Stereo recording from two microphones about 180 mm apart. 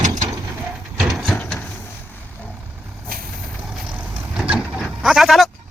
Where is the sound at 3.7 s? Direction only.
5° right (ahead or behind).